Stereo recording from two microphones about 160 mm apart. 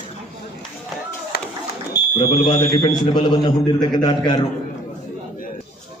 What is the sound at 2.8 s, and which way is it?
Speech, 30° left (ahead or behind).